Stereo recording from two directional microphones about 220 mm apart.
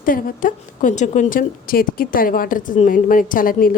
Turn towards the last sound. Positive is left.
turn(degrees=40)  # may be behind; listen again after turning